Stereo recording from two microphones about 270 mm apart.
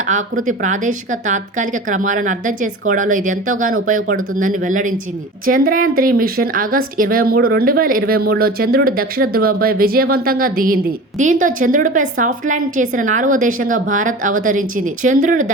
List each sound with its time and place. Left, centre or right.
0.4 s a woman's voice: right